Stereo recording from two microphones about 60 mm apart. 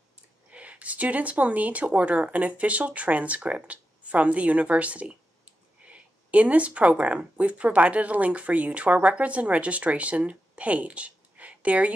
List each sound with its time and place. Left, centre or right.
0.5 s speech: right